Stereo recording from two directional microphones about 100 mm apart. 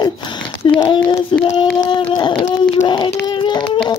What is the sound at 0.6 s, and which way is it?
Speech, 60° left (ahead or behind).